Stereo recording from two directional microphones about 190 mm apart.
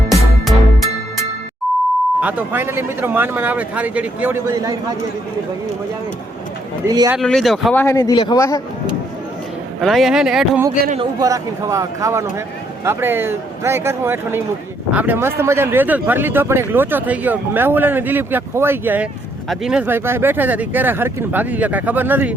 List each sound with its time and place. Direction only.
1.7 s beep: centre (ahead or behind)
2.2 s speech: 10° right (ahead or behind)
6.8 s speech: 20° right (ahead or behind)
7.2 s a man's voice: centre (ahead or behind); by 8.6 s 15° left (ahead or behind)
9.8 s speech: centre (ahead or behind)
11.2 s speech: 15° right (ahead or behind)